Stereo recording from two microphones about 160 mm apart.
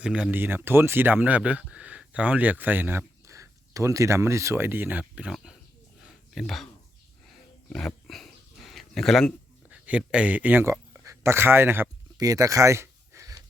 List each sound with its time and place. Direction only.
0.0 s speech: 5° right (ahead or behind)
6.1 s a sound: centre (ahead or behind)
7.3 s dog: 5° left (ahead or behind)
10.1 s speech: 10° right (ahead or behind)